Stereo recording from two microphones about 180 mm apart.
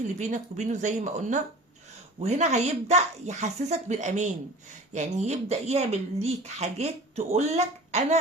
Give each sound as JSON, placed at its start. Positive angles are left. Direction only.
{"t": 0.2, "sound": "speech", "side_deg": -40}